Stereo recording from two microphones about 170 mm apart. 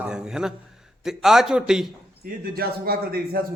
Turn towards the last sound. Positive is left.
turn(degrees=-60)  # may be behind; listen again after turning